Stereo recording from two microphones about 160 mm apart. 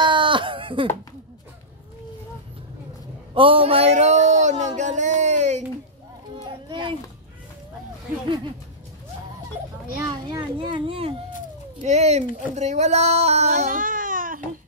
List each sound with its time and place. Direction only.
0.0 s a sound: 30° right (ahead or behind)
3.3 s speech: 35° right (ahead or behind)
6.7 s a child's voice: 30° right (ahead or behind)
10.2 s speech: 30° right (ahead or behind); by 14.4 s 60° right (ahead or behind)